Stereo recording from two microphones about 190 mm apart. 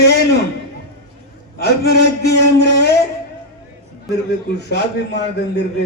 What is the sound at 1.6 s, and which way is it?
A man's voice, 60° left (ahead or behind).